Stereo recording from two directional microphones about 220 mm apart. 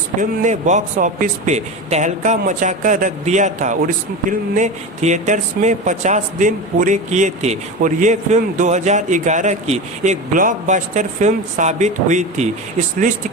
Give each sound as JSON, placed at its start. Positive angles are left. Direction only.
{"t": 0.2, "sound": "speech", "side_deg": -35}